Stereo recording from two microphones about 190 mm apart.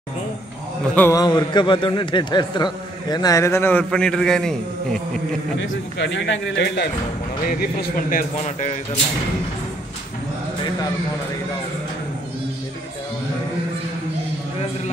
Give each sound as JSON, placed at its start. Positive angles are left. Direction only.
{"t": 0.9, "sound": "a man's voice", "side_deg": 15}
{"t": 5.6, "sound": "a man's voice", "side_deg": 70}
{"t": 7.4, "sound": "speech", "side_deg": 45}